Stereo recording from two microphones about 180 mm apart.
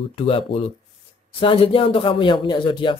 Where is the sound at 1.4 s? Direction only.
30° left (ahead or behind).